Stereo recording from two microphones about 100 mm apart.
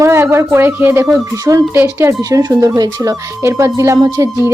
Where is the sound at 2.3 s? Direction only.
35° right (ahead or behind).